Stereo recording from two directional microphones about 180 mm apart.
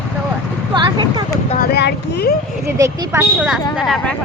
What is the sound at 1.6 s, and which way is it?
Speech, 60° left (ahead or behind).